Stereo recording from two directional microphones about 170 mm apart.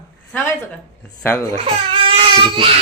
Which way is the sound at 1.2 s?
15° left (ahead or behind).